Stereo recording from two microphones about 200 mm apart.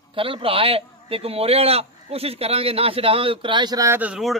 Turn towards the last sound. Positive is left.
turn(degrees=-5)  # may be behind; listen again after turning